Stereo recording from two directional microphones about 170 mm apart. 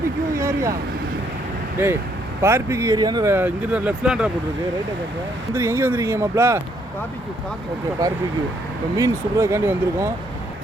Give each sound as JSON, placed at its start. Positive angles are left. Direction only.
{"t": 0.3, "sound": "vehicle", "side_deg": -20}
{"t": 1.8, "sound": "speech", "side_deg": -15}
{"t": 3.3, "sound": "speech", "side_deg": -10}
{"t": 5.5, "sound": "speech", "side_deg": -15}
{"t": 8.0, "sound": "speech", "side_deg": -20}